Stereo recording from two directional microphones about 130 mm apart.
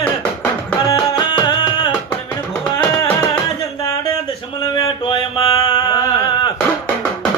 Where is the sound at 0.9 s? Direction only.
35° left (ahead or behind).